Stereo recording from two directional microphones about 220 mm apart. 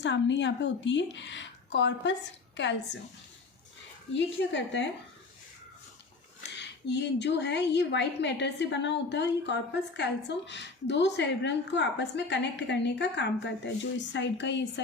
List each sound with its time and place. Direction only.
0.0 s a woman's voice: 55° left (ahead or behind)
4.1 s a woman's voice: 55° left (ahead or behind)
6.6 s a woman's voice: 50° left (ahead or behind)